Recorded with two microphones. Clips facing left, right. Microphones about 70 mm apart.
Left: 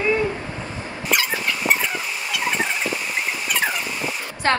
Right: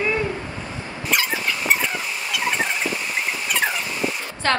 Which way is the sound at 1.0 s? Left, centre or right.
Centre.